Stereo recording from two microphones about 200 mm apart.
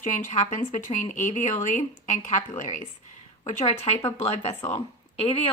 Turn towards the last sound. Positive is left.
turn(degrees=30)  # may be behind; listen again after turning